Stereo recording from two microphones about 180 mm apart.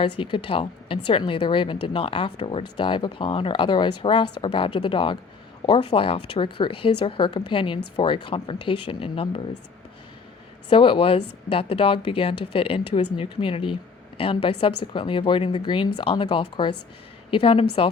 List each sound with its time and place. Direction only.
0.0 s a woman's voice: 30° left (ahead or behind)
10.7 s a woman's voice: 30° left (ahead or behind)